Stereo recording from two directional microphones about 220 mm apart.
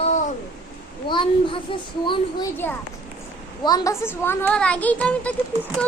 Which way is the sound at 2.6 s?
10° left (ahead or behind).